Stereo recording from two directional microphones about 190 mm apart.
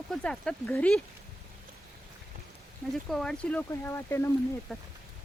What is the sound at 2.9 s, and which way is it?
Speech, centre (ahead or behind).